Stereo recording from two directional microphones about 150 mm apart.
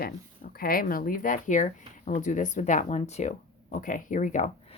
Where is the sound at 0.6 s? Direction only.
70° left (ahead or behind).